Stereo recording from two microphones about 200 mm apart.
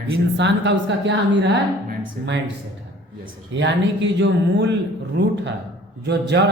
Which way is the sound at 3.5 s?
65° right (ahead or behind).